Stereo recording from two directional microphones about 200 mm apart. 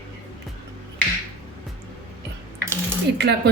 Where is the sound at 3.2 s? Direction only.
50° right (ahead or behind).